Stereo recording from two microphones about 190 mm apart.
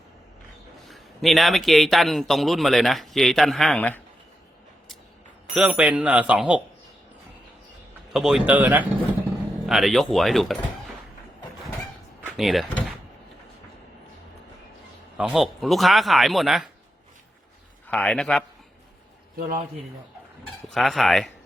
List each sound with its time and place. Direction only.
0.9 s a man's voice: centre (ahead or behind)
5.5 s speech: 5° right (ahead or behind)
8.1 s a man's voice: centre (ahead or behind)
12.2 s door: centre (ahead or behind)
15.2 s a man's voice: centre (ahead or behind)
17.8 s a man's voice: 5° left (ahead or behind)
19.4 s a man's voice: 40° right (ahead or behind)
20.7 s a man's voice: centre (ahead or behind)